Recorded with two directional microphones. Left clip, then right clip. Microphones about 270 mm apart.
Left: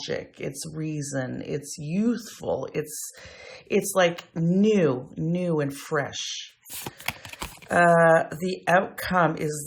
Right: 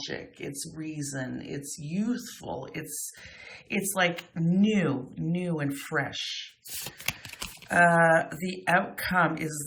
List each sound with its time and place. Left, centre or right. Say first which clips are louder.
0.8 s speech: left 6 dB; left